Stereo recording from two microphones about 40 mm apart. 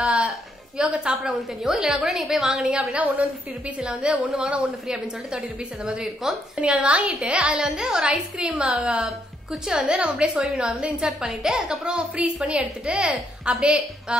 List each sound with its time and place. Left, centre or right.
0.0 s a sound: centre
0.7 s a woman's voice: right
1.2 s a woman's voice: centre
2.9 s a woman's voice: right
4.8 s a woman's voice: centre
6.5 s a woman's voice: right
10.4 s a woman's voice: centre